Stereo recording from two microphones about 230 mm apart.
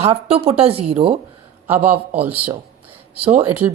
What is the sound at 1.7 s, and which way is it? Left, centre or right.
Speech, centre.